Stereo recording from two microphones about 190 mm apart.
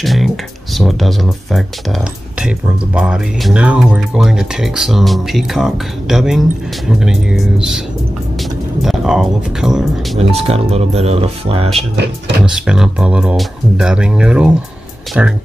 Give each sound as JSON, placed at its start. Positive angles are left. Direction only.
{"t": 0.0, "sound": "a sound", "side_deg": 0}
{"t": 0.7, "sound": "speech", "side_deg": 0}
{"t": 8.8, "sound": "speech", "side_deg": 0}
{"t": 10.1, "sound": "speech", "side_deg": -35}
{"t": 12.4, "sound": "speech", "side_deg": -5}